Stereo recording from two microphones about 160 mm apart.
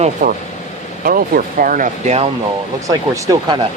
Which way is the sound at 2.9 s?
20° right (ahead or behind).